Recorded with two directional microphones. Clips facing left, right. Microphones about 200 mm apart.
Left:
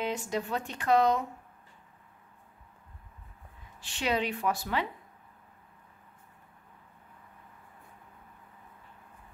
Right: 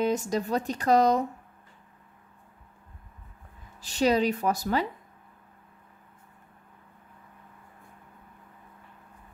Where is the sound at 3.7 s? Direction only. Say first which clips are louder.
Right 7 dB; 40° right (ahead or behind).